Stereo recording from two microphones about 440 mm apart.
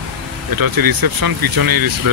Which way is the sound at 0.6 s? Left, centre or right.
Right.